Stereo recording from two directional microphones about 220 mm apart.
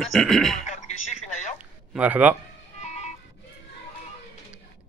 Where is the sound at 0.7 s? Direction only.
30° left (ahead or behind).